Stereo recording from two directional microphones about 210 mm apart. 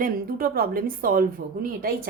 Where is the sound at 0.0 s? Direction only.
45° right (ahead or behind).